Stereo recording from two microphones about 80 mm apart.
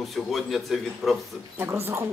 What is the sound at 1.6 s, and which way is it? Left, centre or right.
Speech, right.